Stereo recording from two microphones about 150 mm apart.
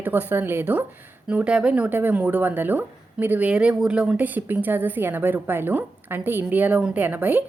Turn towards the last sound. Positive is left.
turn(degrees=-15)  # may be behind; listen again after turning